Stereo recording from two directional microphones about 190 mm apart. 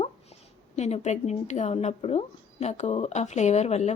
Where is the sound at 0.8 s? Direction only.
35° left (ahead or behind).